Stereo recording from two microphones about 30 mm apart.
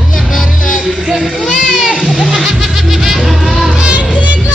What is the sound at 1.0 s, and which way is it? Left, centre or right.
Children playing, right.